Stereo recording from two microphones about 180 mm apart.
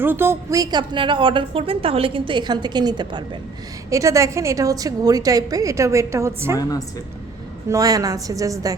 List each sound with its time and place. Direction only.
0.0 s a woman's voice: 10° right (ahead or behind)
6.6 s a woman's voice: 20° left (ahead or behind)
7.7 s a woman's voice: 20° right (ahead or behind)